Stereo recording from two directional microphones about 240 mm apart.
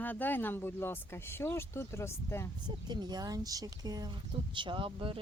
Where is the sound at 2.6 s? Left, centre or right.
Centre.